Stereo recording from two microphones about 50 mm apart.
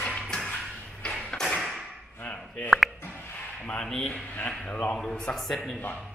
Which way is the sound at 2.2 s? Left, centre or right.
Left.